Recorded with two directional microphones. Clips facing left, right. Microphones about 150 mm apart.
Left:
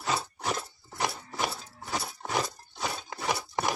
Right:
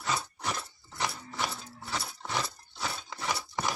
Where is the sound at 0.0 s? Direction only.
35° left (ahead or behind).